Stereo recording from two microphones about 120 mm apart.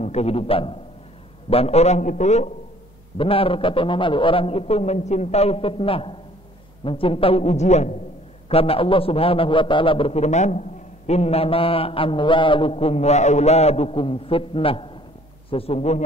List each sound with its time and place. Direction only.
0.0 s a man's voice: 60° left (ahead or behind)
3.2 s a man's voice: 50° left (ahead or behind); by 7.9 s 70° left (ahead or behind)
8.5 s a man's voice: 50° left (ahead or behind); by 10.6 s 70° left (ahead or behind)
11.1 s a man's voice: 60° left (ahead or behind)